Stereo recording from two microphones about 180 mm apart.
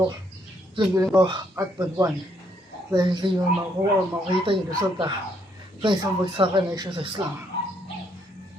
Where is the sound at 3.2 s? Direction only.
25° right (ahead or behind).